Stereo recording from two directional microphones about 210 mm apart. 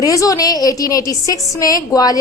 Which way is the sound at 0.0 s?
15° left (ahead or behind).